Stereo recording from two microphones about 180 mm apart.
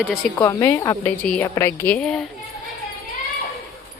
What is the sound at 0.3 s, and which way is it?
A woman's voice, 15° left (ahead or behind).